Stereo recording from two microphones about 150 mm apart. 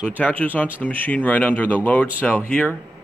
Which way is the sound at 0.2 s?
10° left (ahead or behind).